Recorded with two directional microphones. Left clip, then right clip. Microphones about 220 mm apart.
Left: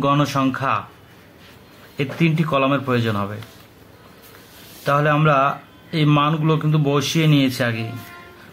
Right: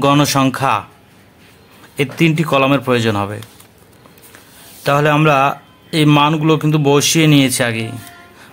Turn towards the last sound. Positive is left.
turn(degrees=-55)  # may be behind; listen again after turning